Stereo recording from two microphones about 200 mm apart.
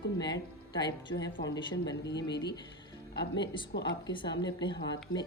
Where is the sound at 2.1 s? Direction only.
60° left (ahead or behind).